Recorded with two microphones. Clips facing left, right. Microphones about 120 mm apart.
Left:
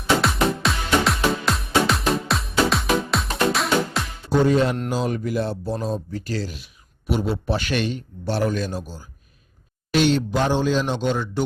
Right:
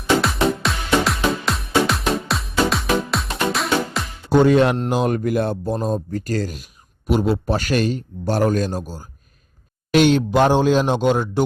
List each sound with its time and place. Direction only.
0.0 s music: centre (ahead or behind)
4.3 s speech: 70° right (ahead or behind)
4.9 s a man's voice: 55° right (ahead or behind)
9.9 s a man's voice: 55° right (ahead or behind)